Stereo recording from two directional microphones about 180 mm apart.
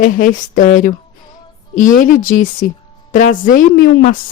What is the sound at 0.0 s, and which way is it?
Speech, 45° left (ahead or behind).